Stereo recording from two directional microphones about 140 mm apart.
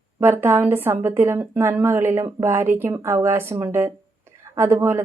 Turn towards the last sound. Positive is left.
turn(degrees=-20)  # may be behind; listen again after turning